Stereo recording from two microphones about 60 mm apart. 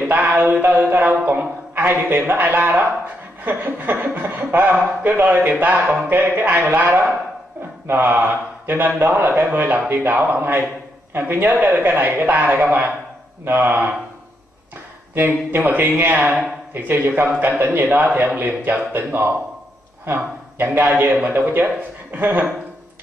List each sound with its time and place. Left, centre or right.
0.1 s a man's voice: right
15.1 s a man's voice: right
20.5 s a man's voice: right
20.8 s a man's voice: right